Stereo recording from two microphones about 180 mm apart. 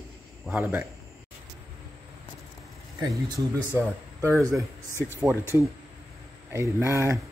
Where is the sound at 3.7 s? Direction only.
10° right (ahead or behind).